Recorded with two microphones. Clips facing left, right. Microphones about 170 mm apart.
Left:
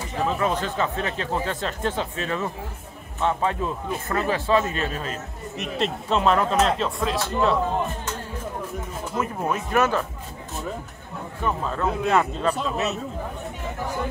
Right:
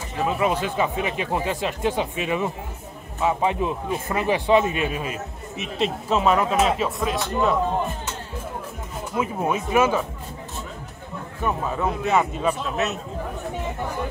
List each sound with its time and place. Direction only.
0.2 s a man's voice: 10° right (ahead or behind)
9.1 s speech: 10° right (ahead or behind)
11.4 s speech: 10° right (ahead or behind)